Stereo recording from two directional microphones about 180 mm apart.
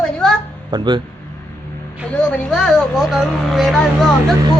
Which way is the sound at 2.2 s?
5° left (ahead or behind).